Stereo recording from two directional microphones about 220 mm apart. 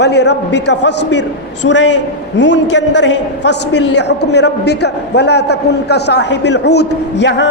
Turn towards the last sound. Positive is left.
turn(degrees=55)  # may be behind; listen again after turning